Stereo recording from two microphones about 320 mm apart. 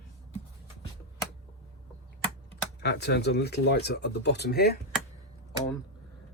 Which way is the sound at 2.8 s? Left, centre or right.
Left.